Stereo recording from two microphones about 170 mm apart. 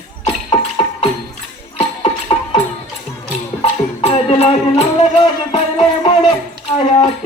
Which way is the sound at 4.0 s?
35° left (ahead or behind).